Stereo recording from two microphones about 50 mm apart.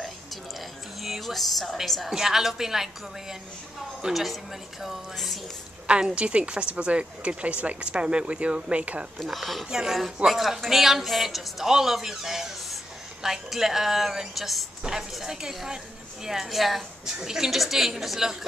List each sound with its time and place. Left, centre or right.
1.0 s speech: centre
2.0 s a woman's voice: centre
5.9 s speech: right
9.2 s speech: centre
9.7 s a woman's voice: centre